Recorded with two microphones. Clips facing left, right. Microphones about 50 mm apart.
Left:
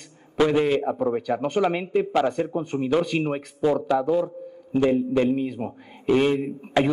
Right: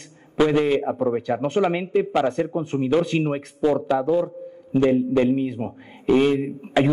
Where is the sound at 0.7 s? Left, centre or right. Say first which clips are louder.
Right 1 dB; centre.